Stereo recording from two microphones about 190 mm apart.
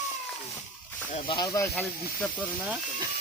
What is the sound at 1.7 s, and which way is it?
Speech, centre (ahead or behind).